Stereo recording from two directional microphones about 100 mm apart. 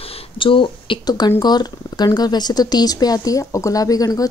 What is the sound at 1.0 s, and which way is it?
Speech, 45° left (ahead or behind).